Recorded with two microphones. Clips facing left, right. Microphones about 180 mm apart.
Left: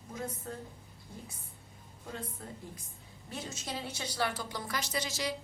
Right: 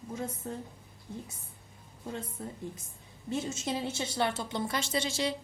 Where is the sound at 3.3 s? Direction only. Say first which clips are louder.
Right 7 dB; 25° right (ahead or behind).